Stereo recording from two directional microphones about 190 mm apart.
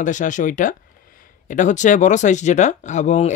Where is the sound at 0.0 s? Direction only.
40° left (ahead or behind).